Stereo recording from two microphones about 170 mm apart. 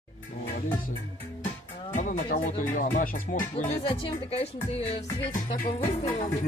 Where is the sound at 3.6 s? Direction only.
30° left (ahead or behind).